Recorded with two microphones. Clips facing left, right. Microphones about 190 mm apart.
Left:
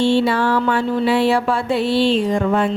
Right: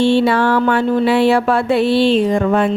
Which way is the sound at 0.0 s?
60° right (ahead or behind).